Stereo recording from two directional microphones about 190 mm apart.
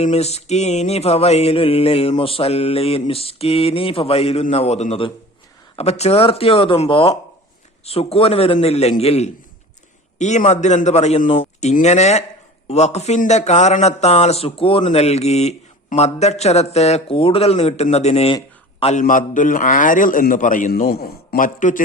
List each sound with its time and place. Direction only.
0.0 s a man's voice: 35° left (ahead or behind)